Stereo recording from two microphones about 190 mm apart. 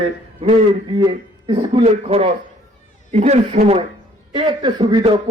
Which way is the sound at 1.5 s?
30° right (ahead or behind).